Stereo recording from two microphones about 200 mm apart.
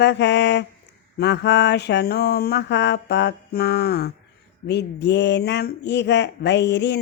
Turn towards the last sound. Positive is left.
turn(degrees=60)  # may be behind; listen again after turning